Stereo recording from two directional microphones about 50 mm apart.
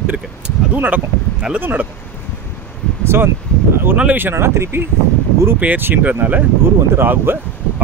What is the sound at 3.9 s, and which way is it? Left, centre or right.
Speech, right.